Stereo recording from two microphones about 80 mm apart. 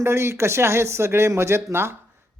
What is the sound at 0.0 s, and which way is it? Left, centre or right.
Speech, right.